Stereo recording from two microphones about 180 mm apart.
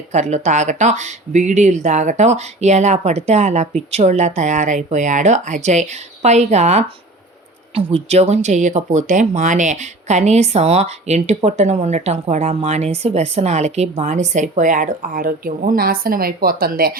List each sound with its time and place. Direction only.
0.1 s speech: 40° right (ahead or behind); by 17.0 s 55° right (ahead or behind)